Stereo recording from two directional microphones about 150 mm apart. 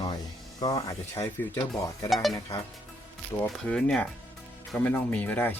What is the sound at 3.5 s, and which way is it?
Speech, 5° left (ahead or behind).